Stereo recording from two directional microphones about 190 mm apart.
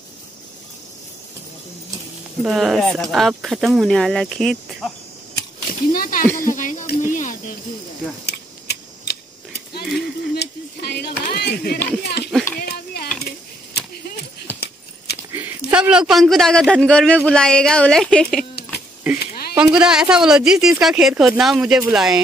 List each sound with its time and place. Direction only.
2.4 s speech: centre (ahead or behind)
5.7 s speech: 50° left (ahead or behind)
8.3 s scissors: 60° left (ahead or behind)
9.9 s speech: 55° left (ahead or behind)
12.5 s a sound: 55° left (ahead or behind)
13.7 s keys jangling: 55° left (ahead or behind)
15.7 s speech: 5° right (ahead or behind)
18.6 s a sound: 55° left (ahead or behind)
19.5 s speech: 5° right (ahead or behind)